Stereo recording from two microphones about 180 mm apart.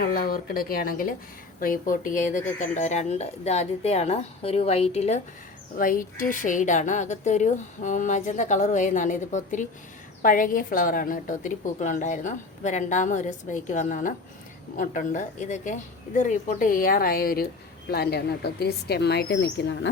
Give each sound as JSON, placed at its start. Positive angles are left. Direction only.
{"t": 0.0, "sound": "speech", "side_deg": 55}
{"t": 5.7, "sound": "a woman's voice", "side_deg": 50}